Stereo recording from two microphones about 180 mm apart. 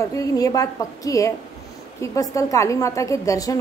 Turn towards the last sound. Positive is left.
turn(degrees=20)  # may be behind; listen again after turning